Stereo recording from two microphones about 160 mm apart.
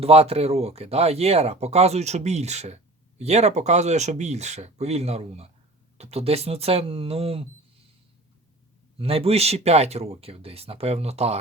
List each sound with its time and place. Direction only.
0.0 s speech: 40° right (ahead or behind)
9.0 s speech: 35° right (ahead or behind)